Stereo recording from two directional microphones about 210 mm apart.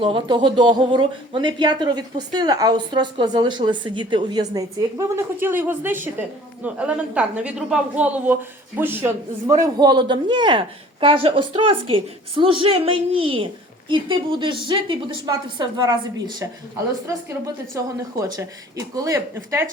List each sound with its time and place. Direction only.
0.0 s a man's voice: 20° right (ahead or behind)